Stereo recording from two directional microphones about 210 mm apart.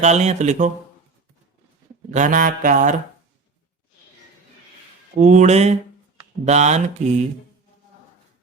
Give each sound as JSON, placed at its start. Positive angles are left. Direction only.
{"t": 0.0, "sound": "mantra", "side_deg": -35}
{"t": 2.0, "sound": "mantra", "side_deg": -35}
{"t": 5.1, "sound": "mantra", "side_deg": -35}